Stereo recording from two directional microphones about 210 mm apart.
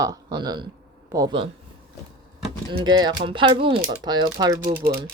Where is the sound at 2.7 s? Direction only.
20° right (ahead or behind).